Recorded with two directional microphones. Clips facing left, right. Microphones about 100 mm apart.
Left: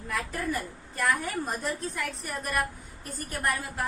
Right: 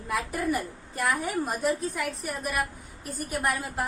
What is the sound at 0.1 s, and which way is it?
A woman's voice, 15° right (ahead or behind).